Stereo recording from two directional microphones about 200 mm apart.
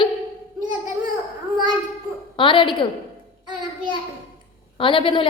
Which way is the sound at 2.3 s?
25° left (ahead or behind).